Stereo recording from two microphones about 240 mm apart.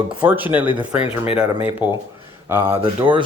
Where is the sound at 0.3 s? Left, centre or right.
Centre.